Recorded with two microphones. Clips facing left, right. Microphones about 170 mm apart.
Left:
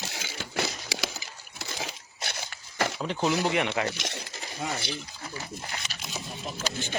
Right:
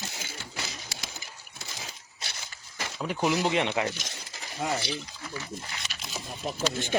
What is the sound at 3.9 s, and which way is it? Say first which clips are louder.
Speech: left 6 dB; 70° left (ahead or behind).